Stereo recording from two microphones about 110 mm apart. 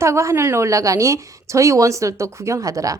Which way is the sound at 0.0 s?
25° right (ahead or behind).